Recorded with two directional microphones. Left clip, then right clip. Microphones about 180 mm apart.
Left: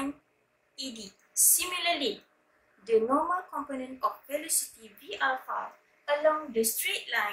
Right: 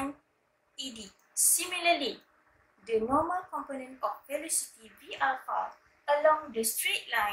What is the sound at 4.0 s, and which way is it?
Speech, 15° left (ahead or behind).